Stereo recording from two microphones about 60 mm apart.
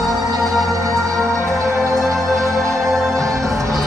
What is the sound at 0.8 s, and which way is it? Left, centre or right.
Music, right.